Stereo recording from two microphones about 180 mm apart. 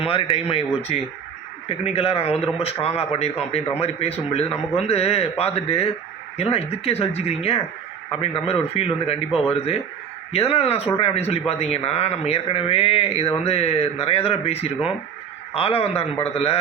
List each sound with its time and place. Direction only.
0.0 s speech: 30° left (ahead or behind)